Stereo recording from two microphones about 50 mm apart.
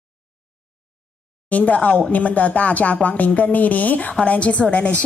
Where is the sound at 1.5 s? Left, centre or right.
Left.